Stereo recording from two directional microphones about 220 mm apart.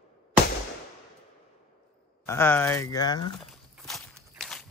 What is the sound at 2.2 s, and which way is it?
Speech, 10° left (ahead or behind).